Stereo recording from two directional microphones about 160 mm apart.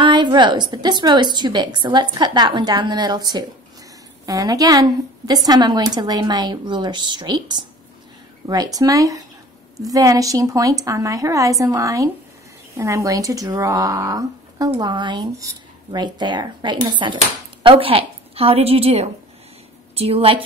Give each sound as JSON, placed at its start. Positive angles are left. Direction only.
{"t": 0.0, "sound": "a woman's voice", "side_deg": -30}